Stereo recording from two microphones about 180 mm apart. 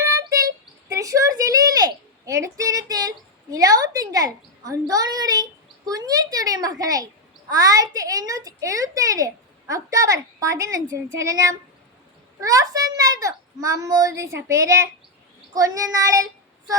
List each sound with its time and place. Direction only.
0.0 s a sound: 20° right (ahead or behind)
7.5 s a woman's voice: 20° right (ahead or behind)
12.4 s a woman's voice: 20° right (ahead or behind)